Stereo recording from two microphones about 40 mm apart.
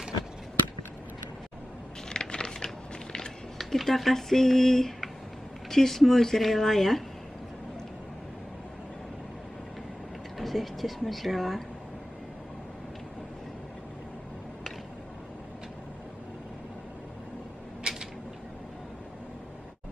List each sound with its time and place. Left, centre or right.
2.0 s crushing: centre
3.5 s speech: centre
10.3 s speech: centre